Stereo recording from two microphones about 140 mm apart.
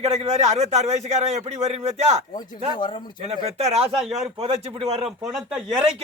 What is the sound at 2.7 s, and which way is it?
Speech, 35° left (ahead or behind).